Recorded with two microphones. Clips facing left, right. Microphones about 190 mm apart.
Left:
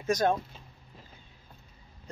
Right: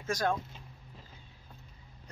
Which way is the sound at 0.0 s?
20° left (ahead or behind).